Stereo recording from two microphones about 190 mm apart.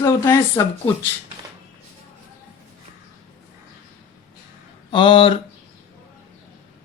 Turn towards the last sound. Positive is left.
turn(degrees=30)  # may be behind; listen again after turning